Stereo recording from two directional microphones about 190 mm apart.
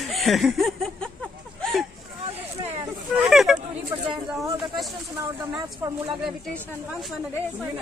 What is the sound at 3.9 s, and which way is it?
Speech, 15° right (ahead or behind).